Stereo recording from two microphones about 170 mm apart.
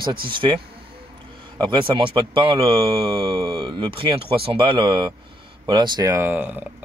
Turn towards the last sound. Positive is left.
turn(degrees=-10)  # may be behind; listen again after turning